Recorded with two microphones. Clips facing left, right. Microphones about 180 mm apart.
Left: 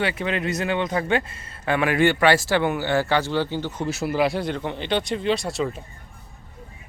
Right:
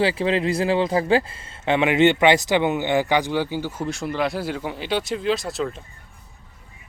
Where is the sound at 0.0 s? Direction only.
30° right (ahead or behind); by 3.8 s 10° right (ahead or behind).